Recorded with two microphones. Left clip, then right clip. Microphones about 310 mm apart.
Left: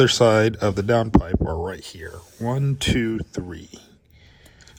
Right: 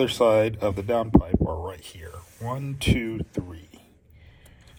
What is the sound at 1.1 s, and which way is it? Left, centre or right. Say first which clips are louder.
Speech: left 1 dB; centre.